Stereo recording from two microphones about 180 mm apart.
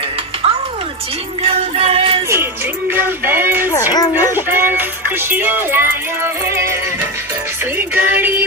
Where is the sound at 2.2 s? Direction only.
15° right (ahead or behind).